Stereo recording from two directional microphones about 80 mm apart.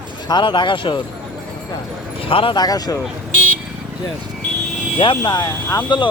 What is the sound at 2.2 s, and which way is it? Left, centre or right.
Speech, left.